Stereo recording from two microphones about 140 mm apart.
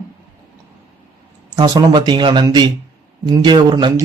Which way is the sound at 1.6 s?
30° right (ahead or behind).